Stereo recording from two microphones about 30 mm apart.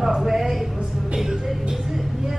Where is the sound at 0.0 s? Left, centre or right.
Centre.